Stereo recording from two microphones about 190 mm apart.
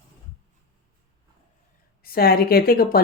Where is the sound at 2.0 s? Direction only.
55° left (ahead or behind).